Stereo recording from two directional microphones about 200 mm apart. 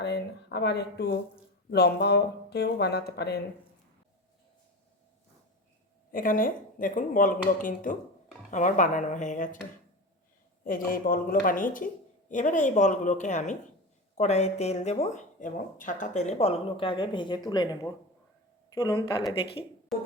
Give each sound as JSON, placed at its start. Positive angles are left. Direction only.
{"t": 0.0, "sound": "speech", "side_deg": 55}
{"t": 6.1, "sound": "speech", "side_deg": 45}
{"t": 10.6, "sound": "speech", "side_deg": 45}